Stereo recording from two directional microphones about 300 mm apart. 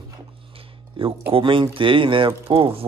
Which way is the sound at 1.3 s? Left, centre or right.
Centre.